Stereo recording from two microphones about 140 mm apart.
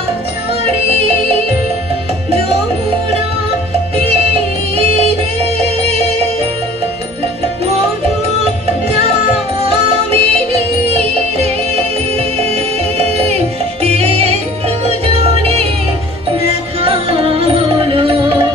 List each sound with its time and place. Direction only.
0.7 s music: 45° right (ahead or behind)
3.9 s music: 45° right (ahead or behind)
8.8 s music: 45° right (ahead or behind)